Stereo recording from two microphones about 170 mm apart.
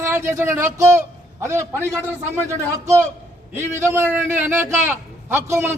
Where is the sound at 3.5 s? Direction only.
15° right (ahead or behind).